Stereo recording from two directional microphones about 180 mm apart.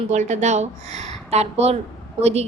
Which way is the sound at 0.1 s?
40° right (ahead or behind).